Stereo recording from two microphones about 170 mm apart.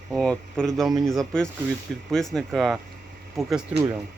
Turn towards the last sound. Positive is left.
turn(degrees=-15)  # may be behind; listen again after turning